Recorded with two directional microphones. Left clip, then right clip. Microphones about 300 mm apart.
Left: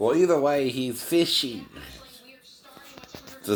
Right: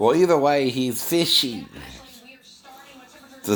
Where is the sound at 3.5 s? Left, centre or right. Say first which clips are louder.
Right 3 dB; right.